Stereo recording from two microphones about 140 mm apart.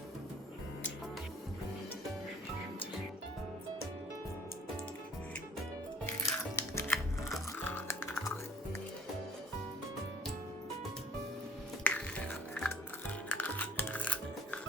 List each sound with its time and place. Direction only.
6.1 s music: 20° left (ahead or behind)
6.9 s music: centre (ahead or behind)
7.6 s music: 15° left (ahead or behind)
11.8 s music: 10° left (ahead or behind)